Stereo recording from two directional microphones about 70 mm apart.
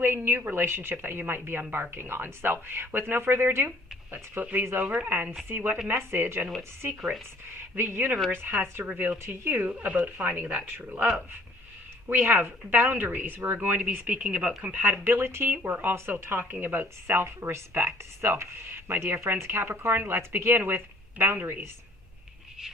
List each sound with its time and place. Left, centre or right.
0.0 s speech: right
7.8 s speech: right
9.6 s speech: centre
12.0 s speech: right; by 14.5 s centre
14.6 s speech: right